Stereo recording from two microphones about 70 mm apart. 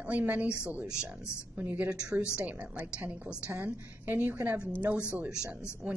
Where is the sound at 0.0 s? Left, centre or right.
Right.